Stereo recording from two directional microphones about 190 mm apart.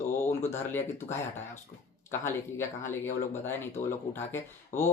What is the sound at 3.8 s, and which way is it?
Speech, 40° left (ahead or behind).